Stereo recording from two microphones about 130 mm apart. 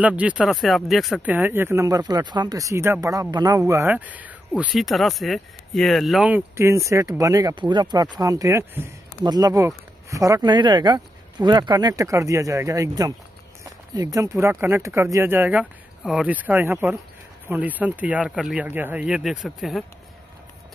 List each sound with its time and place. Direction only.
0.0 s speech: 10° right (ahead or behind)
1.2 s speech: 15° right (ahead or behind)
3.9 s speech: 10° right (ahead or behind)
4.7 s speech: centre (ahead or behind)
6.2 s speech: 15° right (ahead or behind); by 19.8 s centre (ahead or behind)